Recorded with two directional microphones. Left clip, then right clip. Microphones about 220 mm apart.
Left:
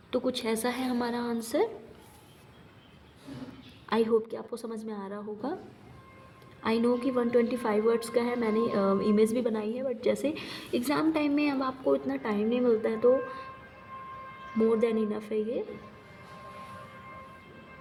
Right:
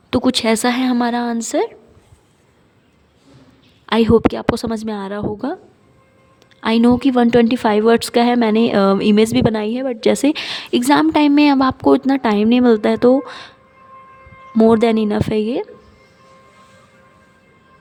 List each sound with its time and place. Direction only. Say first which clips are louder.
0.1 s a woman's voice: right 13 dB; 50° right (ahead or behind)
3.8 s a woman's voice: right 13 dB; 45° right (ahead or behind)
6.6 s a woman's voice: right 12 dB; 40° right (ahead or behind)
14.6 s a woman's voice: right 13 dB; 50° right (ahead or behind)